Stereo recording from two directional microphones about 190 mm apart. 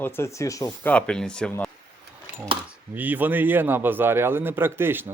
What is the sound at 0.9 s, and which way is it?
Speech, 5° left (ahead or behind).